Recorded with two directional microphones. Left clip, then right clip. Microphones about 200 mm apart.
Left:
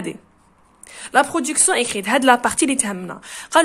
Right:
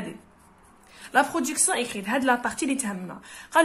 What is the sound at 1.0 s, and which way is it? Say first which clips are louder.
A woman's voice: left 5 dB; 40° left (ahead or behind).